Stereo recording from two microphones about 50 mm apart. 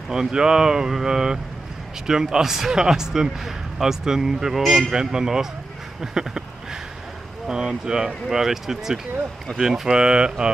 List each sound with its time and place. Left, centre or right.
0.1 s speech: centre
6.1 s a sound: centre
7.4 s speech: centre